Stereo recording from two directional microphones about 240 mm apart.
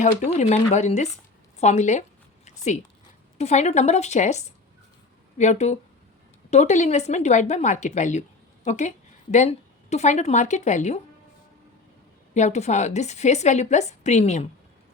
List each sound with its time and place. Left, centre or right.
0.0 s a woman's voice: left
1.5 s a sound: left
3.3 s a woman's voice: left
12.3 s a woman's voice: left